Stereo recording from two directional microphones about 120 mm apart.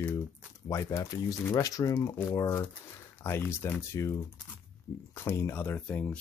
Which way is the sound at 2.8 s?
20° left (ahead or behind).